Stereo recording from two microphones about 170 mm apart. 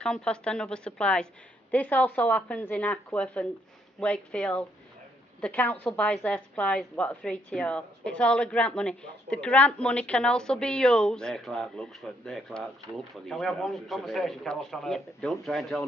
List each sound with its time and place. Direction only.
0.0 s a woman's voice: 5° left (ahead or behind)